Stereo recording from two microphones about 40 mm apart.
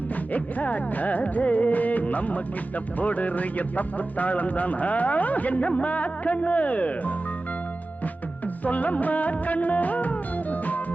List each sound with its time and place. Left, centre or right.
0.3 s speech: left
8.6 s music: left